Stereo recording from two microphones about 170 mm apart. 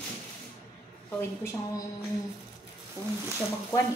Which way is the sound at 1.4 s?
15° left (ahead or behind).